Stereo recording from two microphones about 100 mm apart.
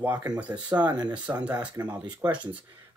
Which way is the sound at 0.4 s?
15° right (ahead or behind).